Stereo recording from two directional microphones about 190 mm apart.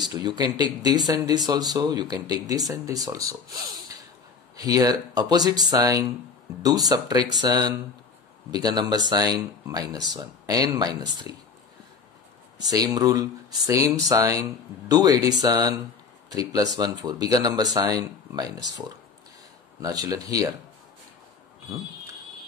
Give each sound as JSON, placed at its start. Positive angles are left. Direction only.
{"t": 0.0, "sound": "speech", "side_deg": -20}
{"t": 4.6, "sound": "speech", "side_deg": -20}
{"t": 12.6, "sound": "speech", "side_deg": -20}